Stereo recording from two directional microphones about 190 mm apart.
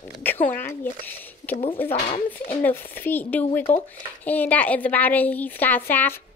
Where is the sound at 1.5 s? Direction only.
30° left (ahead or behind).